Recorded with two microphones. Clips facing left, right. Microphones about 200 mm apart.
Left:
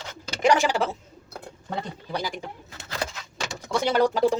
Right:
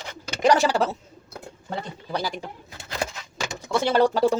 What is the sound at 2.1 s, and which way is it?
Speech, 15° left (ahead or behind).